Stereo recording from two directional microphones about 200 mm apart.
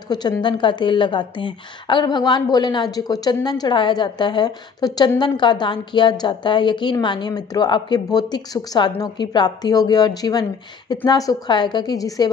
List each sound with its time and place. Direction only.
0.1 s a woman's voice: 20° left (ahead or behind)